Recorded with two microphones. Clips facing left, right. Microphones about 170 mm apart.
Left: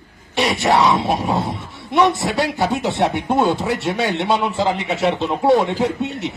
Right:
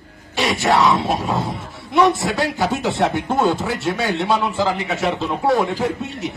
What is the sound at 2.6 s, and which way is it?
Speech, centre (ahead or behind).